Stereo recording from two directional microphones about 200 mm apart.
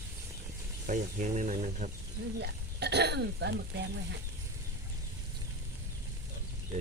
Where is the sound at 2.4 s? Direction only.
55° right (ahead or behind).